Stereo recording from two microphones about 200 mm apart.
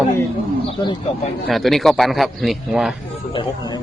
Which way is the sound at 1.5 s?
Centre (ahead or behind).